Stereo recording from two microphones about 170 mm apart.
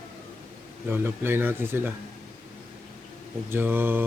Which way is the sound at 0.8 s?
10° right (ahead or behind).